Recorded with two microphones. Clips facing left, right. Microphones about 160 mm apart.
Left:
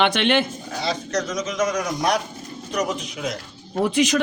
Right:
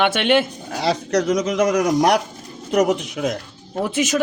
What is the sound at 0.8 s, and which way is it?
A man's voice, 65° right (ahead or behind).